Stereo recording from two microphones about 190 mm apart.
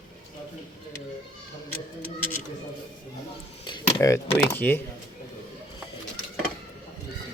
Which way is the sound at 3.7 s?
20° left (ahead or behind).